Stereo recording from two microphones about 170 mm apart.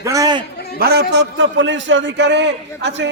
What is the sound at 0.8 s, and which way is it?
A man's voice, 75° right (ahead or behind).